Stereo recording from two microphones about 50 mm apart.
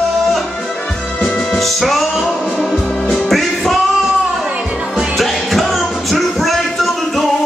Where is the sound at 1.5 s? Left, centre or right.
Centre.